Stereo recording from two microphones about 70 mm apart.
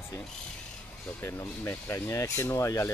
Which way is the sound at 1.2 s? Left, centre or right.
Left.